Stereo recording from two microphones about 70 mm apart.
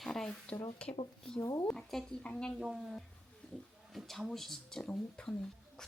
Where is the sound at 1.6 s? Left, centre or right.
Centre.